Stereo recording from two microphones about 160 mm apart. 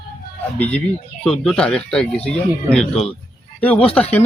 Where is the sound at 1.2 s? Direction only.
5° left (ahead or behind).